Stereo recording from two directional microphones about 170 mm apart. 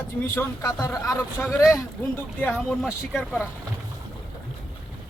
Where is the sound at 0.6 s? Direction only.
20° left (ahead or behind).